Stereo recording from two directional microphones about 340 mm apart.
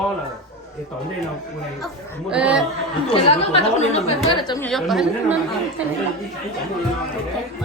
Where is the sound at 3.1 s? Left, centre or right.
Centre.